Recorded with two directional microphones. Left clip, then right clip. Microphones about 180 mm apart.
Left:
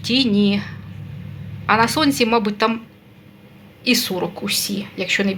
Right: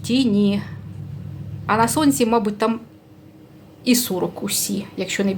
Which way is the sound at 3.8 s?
20° right (ahead or behind).